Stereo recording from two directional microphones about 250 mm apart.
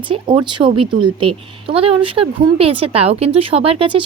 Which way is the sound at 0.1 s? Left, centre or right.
Centre.